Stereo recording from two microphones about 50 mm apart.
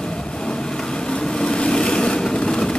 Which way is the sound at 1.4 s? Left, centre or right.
Centre.